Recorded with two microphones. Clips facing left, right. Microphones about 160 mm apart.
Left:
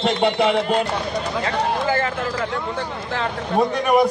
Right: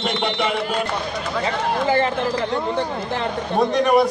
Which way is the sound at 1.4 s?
20° right (ahead or behind).